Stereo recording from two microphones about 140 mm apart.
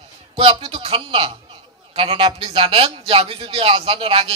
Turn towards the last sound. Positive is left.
turn(degrees=-40)  # may be behind; listen again after turning